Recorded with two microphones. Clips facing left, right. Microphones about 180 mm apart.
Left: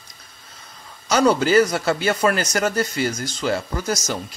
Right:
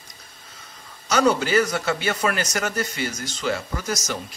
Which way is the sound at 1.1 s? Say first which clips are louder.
Left 3 dB; 35° left (ahead or behind).